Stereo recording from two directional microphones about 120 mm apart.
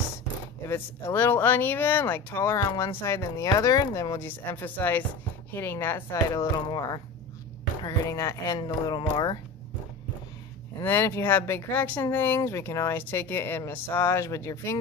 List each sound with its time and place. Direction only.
0.7 s speech: 20° left (ahead or behind)
4.2 s speech: 15° left (ahead or behind)
6.2 s speech: 30° left (ahead or behind)
8.5 s speech: 40° left (ahead or behind)
10.8 s speech: 20° left (ahead or behind)